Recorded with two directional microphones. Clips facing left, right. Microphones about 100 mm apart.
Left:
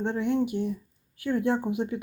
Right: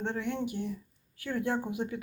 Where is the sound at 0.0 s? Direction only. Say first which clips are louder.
Left 7 dB; 15° left (ahead or behind).